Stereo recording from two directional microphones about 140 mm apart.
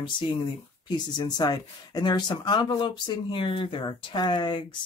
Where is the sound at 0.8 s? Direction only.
30° left (ahead or behind).